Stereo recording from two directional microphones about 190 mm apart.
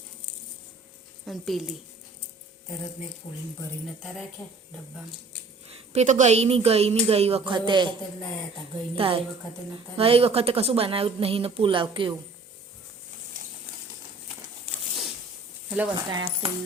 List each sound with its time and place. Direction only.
1.2 s speech: centre (ahead or behind)
3.2 s speech: 30° left (ahead or behind)
3.8 s speech: centre (ahead or behind)
5.9 s speech: 40° right (ahead or behind)
9.0 s a woman's voice: 30° right (ahead or behind)
16.0 s a woman's voice: 20° right (ahead or behind)